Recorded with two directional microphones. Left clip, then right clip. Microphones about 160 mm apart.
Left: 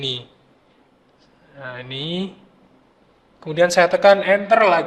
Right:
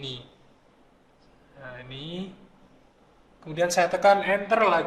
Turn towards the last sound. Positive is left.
turn(degrees=50)  # may be behind; listen again after turning